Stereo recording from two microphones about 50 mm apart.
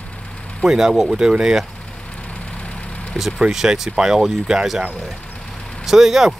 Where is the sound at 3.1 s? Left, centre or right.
Centre.